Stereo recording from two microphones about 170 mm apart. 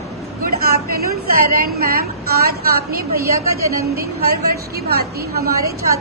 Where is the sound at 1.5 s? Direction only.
60° right (ahead or behind).